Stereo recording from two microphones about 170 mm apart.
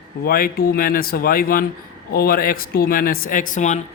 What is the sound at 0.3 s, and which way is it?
Speech, 60° left (ahead or behind).